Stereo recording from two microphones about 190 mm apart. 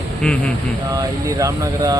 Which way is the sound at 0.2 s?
5° left (ahead or behind).